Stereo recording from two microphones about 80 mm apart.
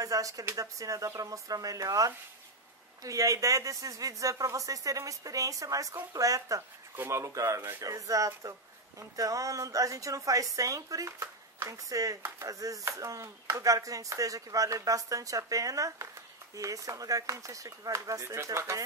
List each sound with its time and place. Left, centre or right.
0.0 s speech: right
7.0 s speech: right